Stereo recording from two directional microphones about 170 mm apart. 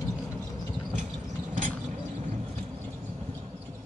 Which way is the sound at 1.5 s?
45° right (ahead or behind).